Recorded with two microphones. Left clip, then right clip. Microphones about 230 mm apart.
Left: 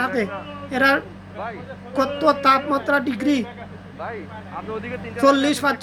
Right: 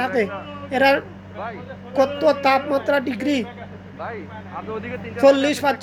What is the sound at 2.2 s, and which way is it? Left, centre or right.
Speech, centre.